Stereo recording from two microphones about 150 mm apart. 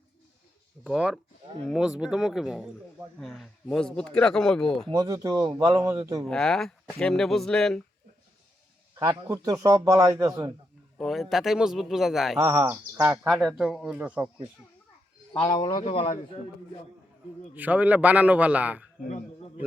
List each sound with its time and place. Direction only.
0.9 s speech: 5° right (ahead or behind)
4.9 s speech: 25° right (ahead or behind)
6.2 s speech: 5° left (ahead or behind)
9.0 s speech: 25° right (ahead or behind)
10.9 s speech: centre (ahead or behind)
12.4 s a man's voice: 20° right (ahead or behind)
13.2 s speech: centre (ahead or behind)
15.4 s a man's voice: 30° left (ahead or behind)
17.5 s a man's voice: 10° right (ahead or behind)
19.0 s speech: 55° left (ahead or behind)